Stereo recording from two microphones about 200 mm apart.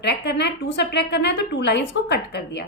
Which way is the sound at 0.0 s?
60° left (ahead or behind).